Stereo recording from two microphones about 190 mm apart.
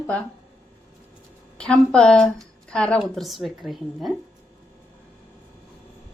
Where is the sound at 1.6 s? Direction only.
5° left (ahead or behind).